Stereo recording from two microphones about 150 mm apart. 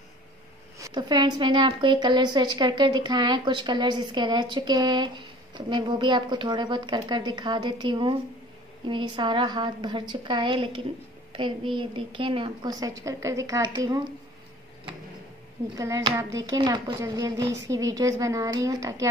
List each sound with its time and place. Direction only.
0.7 s a woman's voice: 25° right (ahead or behind)
12.8 s a woman's voice: 20° right (ahead or behind)
15.7 s a woman's voice: 25° right (ahead or behind)